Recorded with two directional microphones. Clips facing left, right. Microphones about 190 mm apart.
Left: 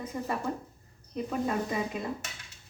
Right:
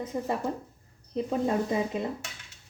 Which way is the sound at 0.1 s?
20° right (ahead or behind).